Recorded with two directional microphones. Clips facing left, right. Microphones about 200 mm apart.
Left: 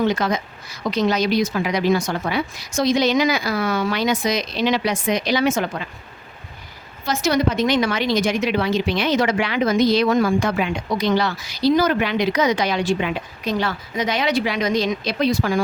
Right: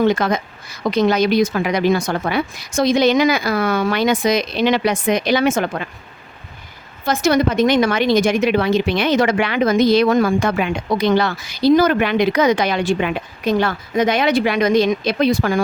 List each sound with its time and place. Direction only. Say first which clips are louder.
0.0 s a woman's voice: right 4 dB; 55° right (ahead or behind)
7.0 s a woman's voice: right 3 dB; 55° right (ahead or behind)